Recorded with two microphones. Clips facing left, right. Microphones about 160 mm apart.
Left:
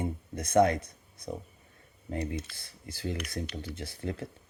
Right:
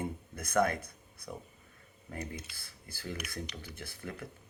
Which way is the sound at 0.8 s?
55° right (ahead or behind).